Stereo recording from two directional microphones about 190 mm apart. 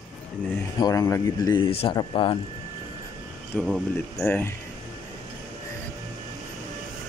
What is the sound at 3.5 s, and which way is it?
Speech, 5° left (ahead or behind).